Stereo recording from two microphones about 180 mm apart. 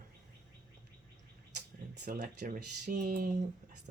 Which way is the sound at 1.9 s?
45° right (ahead or behind).